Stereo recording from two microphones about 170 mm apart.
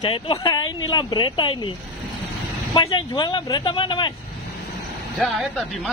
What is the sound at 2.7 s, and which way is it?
Speech, 25° left (ahead or behind).